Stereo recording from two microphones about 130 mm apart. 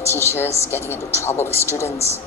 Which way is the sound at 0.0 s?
20° left (ahead or behind).